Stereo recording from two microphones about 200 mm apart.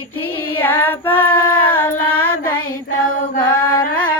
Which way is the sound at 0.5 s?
10° left (ahead or behind).